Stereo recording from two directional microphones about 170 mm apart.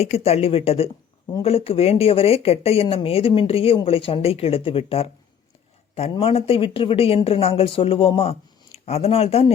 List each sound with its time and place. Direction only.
0.0 s speech: 35° left (ahead or behind)